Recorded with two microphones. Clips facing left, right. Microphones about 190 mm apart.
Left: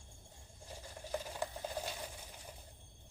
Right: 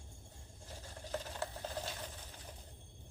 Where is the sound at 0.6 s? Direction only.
10° left (ahead or behind).